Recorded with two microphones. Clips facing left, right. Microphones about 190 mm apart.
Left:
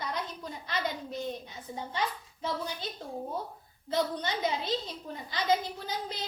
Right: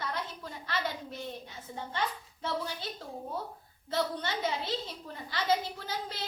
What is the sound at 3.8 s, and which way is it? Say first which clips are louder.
A woman's voice: left 2 dB; 15° left (ahead or behind).